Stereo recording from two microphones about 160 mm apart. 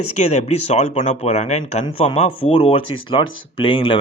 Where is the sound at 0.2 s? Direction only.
45° left (ahead or behind).